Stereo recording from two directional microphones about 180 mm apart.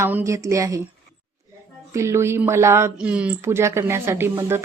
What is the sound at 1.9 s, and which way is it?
Speech, 15° right (ahead or behind).